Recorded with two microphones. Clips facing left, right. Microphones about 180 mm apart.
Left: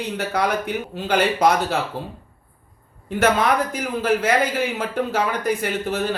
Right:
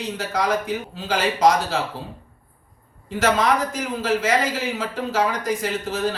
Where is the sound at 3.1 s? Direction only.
60° left (ahead or behind).